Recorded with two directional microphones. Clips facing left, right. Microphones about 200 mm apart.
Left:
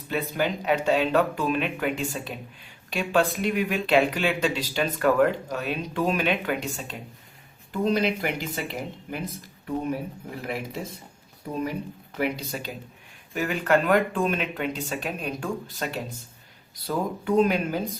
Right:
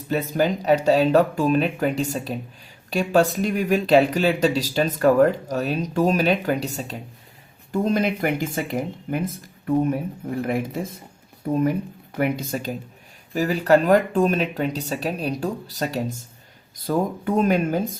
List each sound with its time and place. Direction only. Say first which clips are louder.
0.1 s speech: right 5 dB; 40° right (ahead or behind)
10.4 s speech: right 7 dB; 50° right (ahead or behind)
12.1 s speech: right 5 dB; 50° right (ahead or behind)
13.3 s speech: right 5 dB; 35° right (ahead or behind)